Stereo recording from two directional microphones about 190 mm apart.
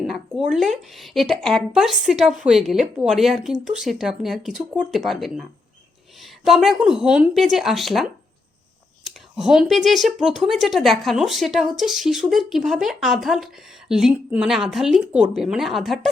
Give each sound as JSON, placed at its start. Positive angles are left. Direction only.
{"t": 0.0, "sound": "speech", "side_deg": 0}